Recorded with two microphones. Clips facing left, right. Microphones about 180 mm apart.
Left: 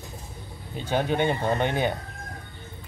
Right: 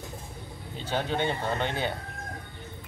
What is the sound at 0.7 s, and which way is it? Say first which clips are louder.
Speech: left 5 dB; 15° left (ahead or behind).